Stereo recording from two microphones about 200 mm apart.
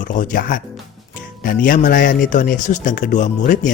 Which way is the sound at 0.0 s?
40° left (ahead or behind).